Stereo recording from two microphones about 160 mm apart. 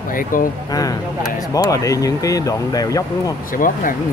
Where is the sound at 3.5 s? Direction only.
60° left (ahead or behind).